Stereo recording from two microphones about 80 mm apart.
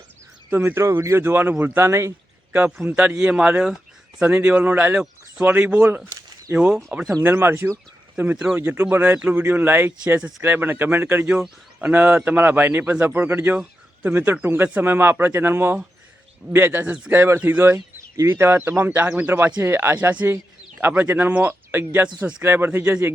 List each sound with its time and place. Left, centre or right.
0.5 s speech: right
2.5 s a man's voice: right
6.5 s speech: right
8.1 s speech: centre
8.5 s speech: right
17.7 s speech: right
22.2 s speech: centre
22.4 s speech: right